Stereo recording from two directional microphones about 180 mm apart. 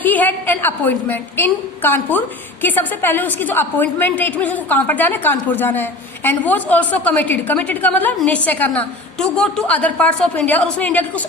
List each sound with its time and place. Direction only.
0.0 s a woman's voice: 10° left (ahead or behind)